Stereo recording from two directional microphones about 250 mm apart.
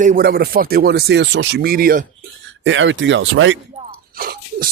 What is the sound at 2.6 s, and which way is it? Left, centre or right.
Speech, right.